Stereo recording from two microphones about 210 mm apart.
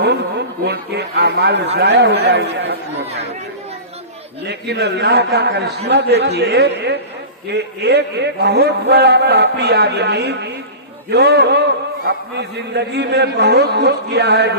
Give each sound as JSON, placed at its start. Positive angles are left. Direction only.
{"t": 0.6, "sound": "a man's voice", "side_deg": -50}
{"t": 4.4, "sound": "a man's voice", "side_deg": -55}